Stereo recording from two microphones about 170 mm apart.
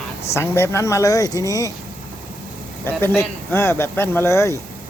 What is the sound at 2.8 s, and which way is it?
Speech, 15° left (ahead or behind).